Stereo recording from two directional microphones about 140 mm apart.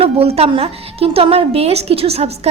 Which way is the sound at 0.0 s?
45° right (ahead or behind).